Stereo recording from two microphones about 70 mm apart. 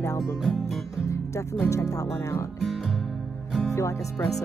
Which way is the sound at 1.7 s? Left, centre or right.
Left.